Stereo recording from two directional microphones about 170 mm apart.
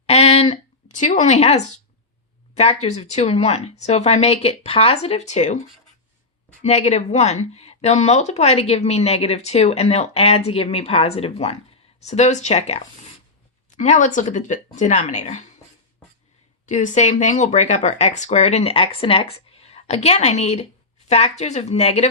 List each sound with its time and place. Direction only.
0.0 s a sound: 35° left (ahead or behind)
2.6 s speech: 40° left (ahead or behind)
6.6 s speech: 40° left (ahead or behind)
16.6 s speech: 45° left (ahead or behind)